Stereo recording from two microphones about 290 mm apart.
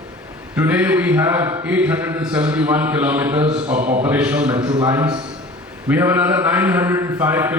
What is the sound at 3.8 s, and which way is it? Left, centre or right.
Speech, right.